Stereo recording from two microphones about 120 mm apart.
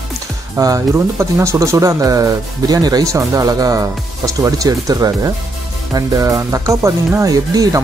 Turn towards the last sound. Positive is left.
turn(degrees=-30)  # may be behind; listen again after turning